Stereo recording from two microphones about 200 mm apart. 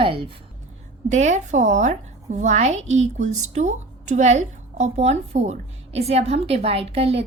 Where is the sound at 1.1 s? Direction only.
35° right (ahead or behind).